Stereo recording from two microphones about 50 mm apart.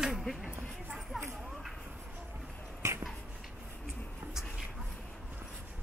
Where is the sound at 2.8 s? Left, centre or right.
Right.